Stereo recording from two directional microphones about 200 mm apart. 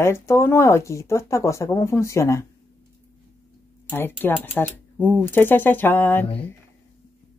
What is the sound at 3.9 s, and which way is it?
Speech, 10° left (ahead or behind).